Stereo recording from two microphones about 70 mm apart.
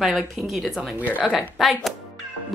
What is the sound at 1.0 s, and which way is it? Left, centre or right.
Speech, right.